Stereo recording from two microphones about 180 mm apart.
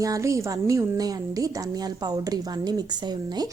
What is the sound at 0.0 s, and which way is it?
A woman's voice, 20° right (ahead or behind).